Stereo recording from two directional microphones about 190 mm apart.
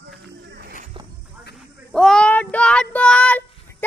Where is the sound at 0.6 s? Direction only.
50° right (ahead or behind).